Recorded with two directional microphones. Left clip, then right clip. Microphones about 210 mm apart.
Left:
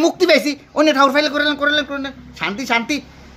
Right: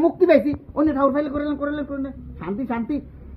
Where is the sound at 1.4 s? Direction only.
70° left (ahead or behind).